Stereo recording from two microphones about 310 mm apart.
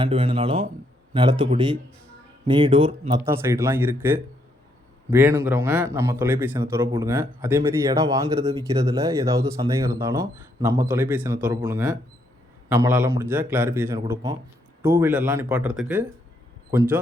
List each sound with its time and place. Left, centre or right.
0.0 s a man's voice: centre